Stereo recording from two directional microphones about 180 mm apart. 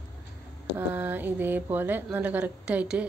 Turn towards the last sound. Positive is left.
turn(degrees=-5)  # may be behind; listen again after turning